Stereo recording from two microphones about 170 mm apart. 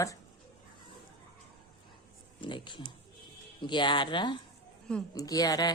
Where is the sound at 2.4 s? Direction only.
30° left (ahead or behind).